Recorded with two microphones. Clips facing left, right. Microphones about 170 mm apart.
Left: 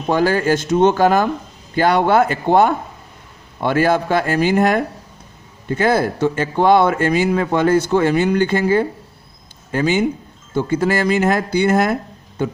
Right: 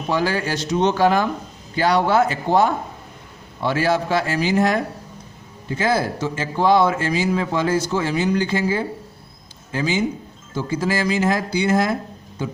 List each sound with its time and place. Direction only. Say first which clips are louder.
0.1 s a man's voice: left 6 dB; 50° left (ahead or behind)